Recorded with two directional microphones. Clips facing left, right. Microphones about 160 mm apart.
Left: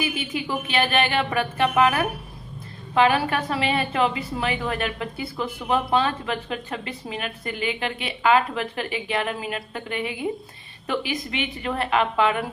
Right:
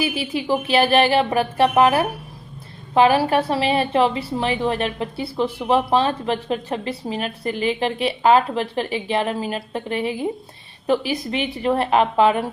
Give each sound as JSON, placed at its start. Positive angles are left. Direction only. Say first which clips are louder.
{"t": 0.0, "sound": "a woman's voice", "louder": "right 4 dB", "side_deg": -35}